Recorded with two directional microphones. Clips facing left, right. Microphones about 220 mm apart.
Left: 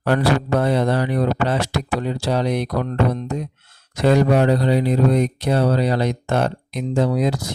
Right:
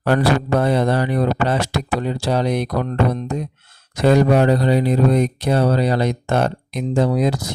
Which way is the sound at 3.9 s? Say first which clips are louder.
Right 2 dB; 45° right (ahead or behind).